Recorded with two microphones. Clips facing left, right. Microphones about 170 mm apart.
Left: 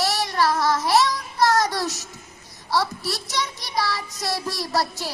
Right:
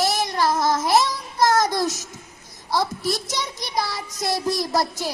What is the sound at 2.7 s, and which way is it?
Speech, 20° right (ahead or behind).